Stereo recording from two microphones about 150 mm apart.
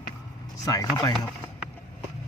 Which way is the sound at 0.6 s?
25° left (ahead or behind).